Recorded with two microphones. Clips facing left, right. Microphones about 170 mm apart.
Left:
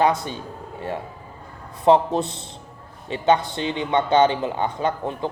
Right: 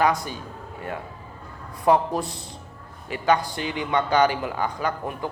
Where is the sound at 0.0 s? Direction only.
25° left (ahead or behind).